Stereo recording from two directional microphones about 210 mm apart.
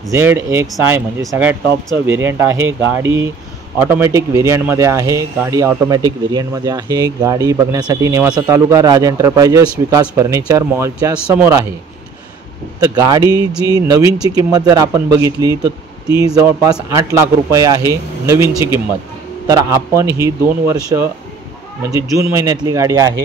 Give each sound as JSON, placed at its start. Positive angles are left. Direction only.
{"t": 0.1, "sound": "speech", "side_deg": -10}
{"t": 12.8, "sound": "speech", "side_deg": -15}